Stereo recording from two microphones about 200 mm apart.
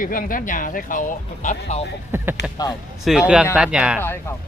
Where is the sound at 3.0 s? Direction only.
5° right (ahead or behind).